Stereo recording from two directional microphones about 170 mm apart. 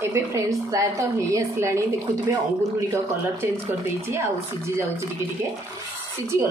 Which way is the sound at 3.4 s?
15° right (ahead or behind).